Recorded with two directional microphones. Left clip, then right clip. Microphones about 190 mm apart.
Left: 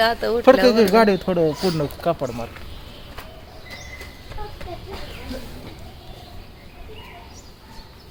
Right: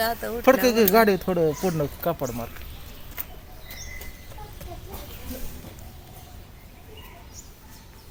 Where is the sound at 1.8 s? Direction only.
25° right (ahead or behind).